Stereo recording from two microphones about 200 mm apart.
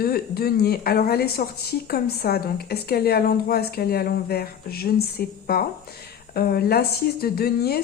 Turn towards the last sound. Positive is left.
turn(degrees=50)  # may be behind; listen again after turning